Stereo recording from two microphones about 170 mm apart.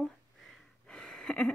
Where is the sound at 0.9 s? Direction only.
5° left (ahead or behind).